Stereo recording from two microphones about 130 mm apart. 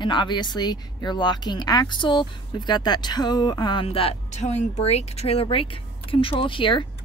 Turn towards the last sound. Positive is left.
turn(degrees=40)  # may be behind; listen again after turning